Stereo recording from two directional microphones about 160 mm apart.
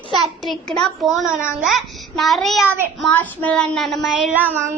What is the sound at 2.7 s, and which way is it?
Speech, 15° right (ahead or behind).